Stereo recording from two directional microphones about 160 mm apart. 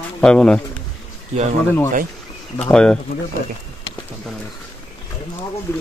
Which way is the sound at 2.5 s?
5° left (ahead or behind).